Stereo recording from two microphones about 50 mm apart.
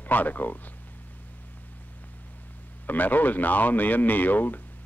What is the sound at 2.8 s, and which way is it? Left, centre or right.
Speech, left.